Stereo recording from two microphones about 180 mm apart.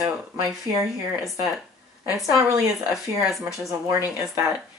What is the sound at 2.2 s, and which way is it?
Speech, 20° right (ahead or behind).